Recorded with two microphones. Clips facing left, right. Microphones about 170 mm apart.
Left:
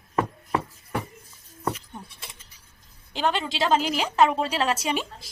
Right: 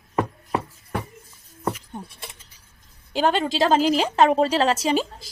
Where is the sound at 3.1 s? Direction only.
45° right (ahead or behind).